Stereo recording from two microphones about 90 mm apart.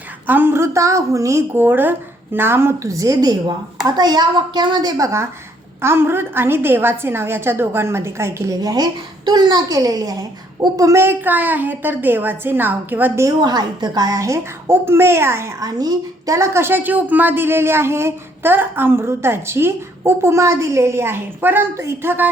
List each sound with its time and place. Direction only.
0.3 s a woman's voice: 20° right (ahead or behind)
1.5 s a woman's voice: 20° right (ahead or behind)
13.2 s a woman's voice: 50° right (ahead or behind); by 15.5 s 30° right (ahead or behind)
15.6 s a woman's voice: 45° right (ahead or behind); by 22.3 s 25° right (ahead or behind)